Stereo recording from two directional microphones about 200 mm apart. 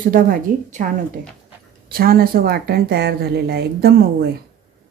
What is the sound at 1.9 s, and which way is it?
Speech, 45° right (ahead or behind).